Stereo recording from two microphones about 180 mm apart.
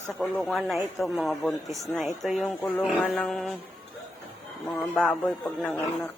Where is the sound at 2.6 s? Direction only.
10° left (ahead or behind).